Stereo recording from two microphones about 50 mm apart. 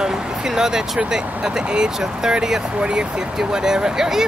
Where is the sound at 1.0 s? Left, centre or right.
Right.